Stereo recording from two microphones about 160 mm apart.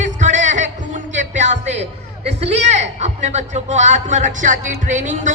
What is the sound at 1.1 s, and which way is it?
A man's voice, 45° right (ahead or behind).